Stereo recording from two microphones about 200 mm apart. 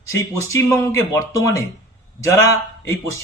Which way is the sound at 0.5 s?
15° left (ahead or behind).